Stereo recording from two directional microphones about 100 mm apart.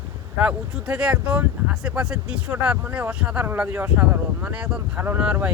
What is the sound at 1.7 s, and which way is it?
Speech, 5° right (ahead or behind).